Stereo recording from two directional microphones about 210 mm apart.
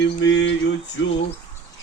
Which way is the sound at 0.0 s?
55° left (ahead or behind).